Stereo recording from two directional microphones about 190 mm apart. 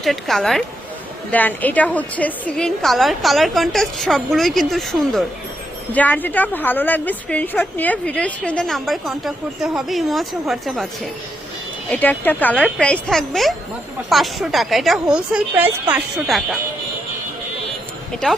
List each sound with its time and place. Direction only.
0.0 s a woman's voice: centre (ahead or behind)
11.9 s a woman's voice: 10° left (ahead or behind)